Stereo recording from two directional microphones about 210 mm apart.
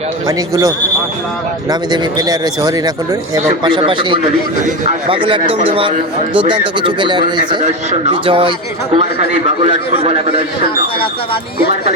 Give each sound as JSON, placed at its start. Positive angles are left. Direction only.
{"t": 0.3, "sound": "speech", "side_deg": -15}
{"t": 1.7, "sound": "a man's voice", "side_deg": -20}
{"t": 9.9, "sound": "a man's voice", "side_deg": -30}